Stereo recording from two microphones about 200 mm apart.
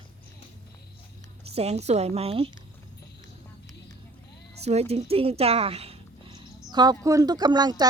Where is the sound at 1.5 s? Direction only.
30° right (ahead or behind).